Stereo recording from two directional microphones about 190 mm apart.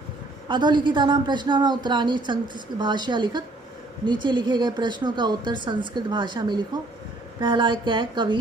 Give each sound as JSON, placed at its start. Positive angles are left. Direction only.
{"t": 0.5, "sound": "a woman's voice", "side_deg": -25}